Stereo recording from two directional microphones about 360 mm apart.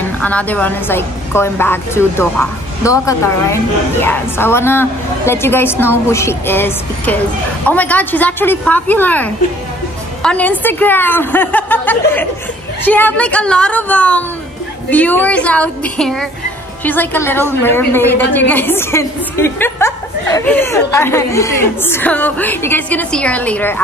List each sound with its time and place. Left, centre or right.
0.2 s a woman's voice: centre